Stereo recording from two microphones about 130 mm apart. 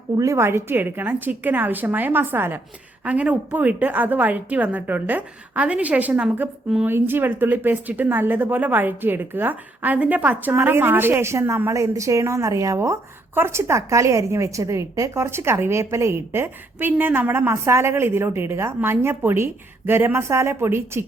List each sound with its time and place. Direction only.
0.2 s a woman's voice: 20° right (ahead or behind)